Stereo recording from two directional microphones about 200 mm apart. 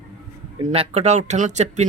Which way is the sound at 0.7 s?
30° right (ahead or behind).